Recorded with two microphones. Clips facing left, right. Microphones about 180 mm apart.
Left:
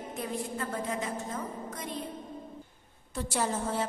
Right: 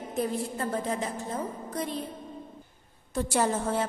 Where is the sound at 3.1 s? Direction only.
50° right (ahead or behind).